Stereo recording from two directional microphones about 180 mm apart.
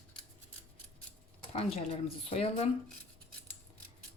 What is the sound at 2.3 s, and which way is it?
Speech, 35° left (ahead or behind).